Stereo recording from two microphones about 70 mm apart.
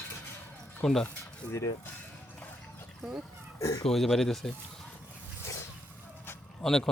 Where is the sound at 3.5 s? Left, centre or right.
Left.